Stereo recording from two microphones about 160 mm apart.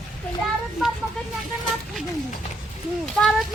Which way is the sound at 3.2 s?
10° left (ahead or behind).